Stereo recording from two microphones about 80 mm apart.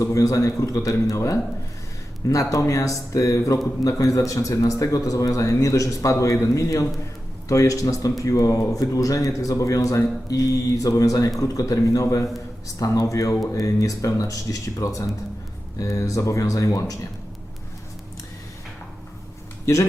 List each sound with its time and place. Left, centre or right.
0.0 s a man's voice: left